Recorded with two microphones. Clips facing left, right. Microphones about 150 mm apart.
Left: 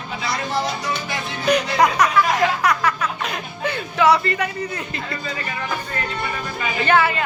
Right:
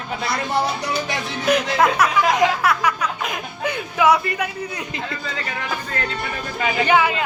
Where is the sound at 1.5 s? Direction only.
5° right (ahead or behind).